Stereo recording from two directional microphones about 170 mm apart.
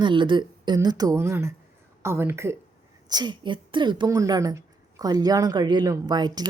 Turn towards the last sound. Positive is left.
turn(degrees=-25)  # may be behind; listen again after turning